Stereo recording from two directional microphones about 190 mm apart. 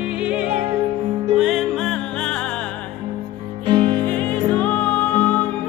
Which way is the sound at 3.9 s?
10° left (ahead or behind).